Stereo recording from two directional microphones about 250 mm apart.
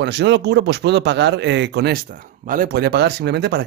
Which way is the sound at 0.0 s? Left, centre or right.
Right.